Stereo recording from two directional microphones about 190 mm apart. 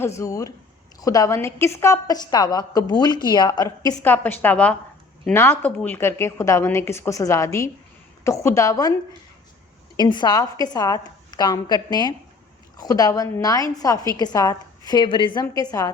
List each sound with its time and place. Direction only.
0.0 s a woman's voice: 15° left (ahead or behind)
10.0 s a woman's voice: 25° left (ahead or behind)